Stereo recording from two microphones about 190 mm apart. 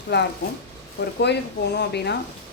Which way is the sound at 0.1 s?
65° left (ahead or behind).